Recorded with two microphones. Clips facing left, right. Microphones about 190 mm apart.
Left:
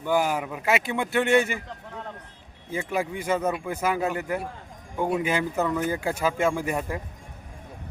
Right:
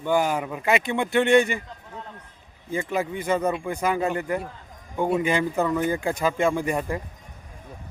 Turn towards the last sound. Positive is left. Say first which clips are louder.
# right 2 dB
turn(degrees=5)  # may be behind; listen again after turning